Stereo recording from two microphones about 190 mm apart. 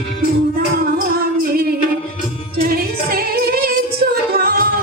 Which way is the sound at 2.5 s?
50° right (ahead or behind).